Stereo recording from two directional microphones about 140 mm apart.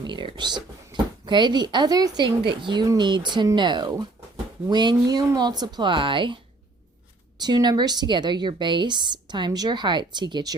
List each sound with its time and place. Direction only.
0.0 s a woman's voice: 35° right (ahead or behind)